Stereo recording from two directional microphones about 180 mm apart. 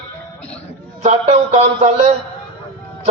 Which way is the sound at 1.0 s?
35° right (ahead or behind).